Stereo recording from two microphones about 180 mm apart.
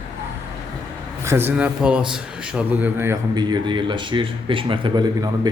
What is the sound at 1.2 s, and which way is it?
A man's voice, 15° right (ahead or behind).